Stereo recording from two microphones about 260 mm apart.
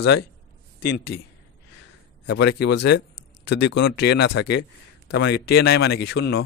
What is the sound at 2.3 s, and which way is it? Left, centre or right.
Speech, left.